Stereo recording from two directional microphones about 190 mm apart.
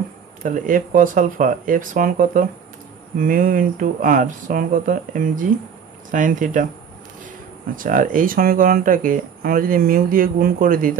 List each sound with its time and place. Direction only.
0.4 s speech: 45° right (ahead or behind)